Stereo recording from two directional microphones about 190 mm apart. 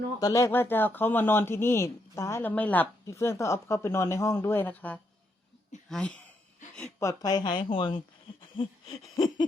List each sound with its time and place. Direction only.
0.2 s speech: 20° left (ahead or behind)
7.0 s speech: 20° left (ahead or behind)